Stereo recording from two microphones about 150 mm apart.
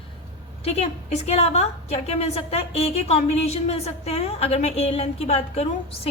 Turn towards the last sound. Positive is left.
turn(degrees=45)  # may be behind; listen again after turning